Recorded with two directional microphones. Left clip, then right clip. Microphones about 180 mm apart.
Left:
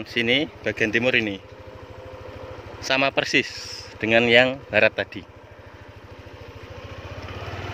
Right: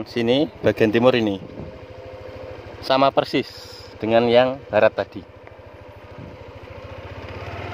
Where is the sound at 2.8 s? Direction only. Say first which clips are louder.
Right 4 dB; 10° left (ahead or behind).